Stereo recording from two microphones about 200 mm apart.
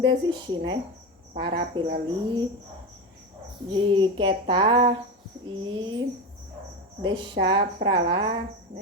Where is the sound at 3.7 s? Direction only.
25° right (ahead or behind).